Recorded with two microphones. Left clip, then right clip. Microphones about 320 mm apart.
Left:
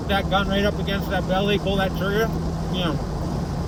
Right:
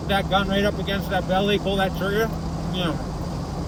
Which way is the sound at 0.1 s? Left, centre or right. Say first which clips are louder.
Even; centre.